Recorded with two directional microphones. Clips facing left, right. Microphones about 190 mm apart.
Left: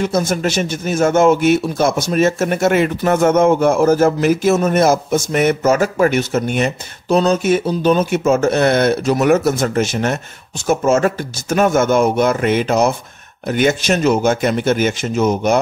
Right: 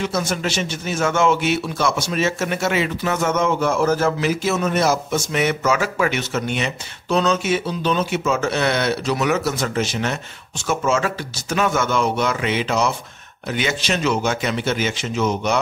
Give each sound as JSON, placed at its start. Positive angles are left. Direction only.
{"t": 0.3, "sound": "a man's voice", "side_deg": 45}